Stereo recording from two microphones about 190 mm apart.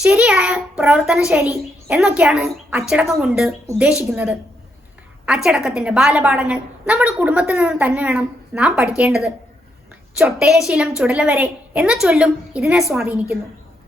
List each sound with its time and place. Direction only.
0.0 s a woman's voice: 5° right (ahead or behind)
10.4 s a woman's voice: 5° right (ahead or behind)